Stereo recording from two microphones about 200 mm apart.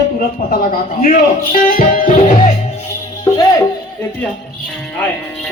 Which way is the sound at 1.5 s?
45° left (ahead or behind).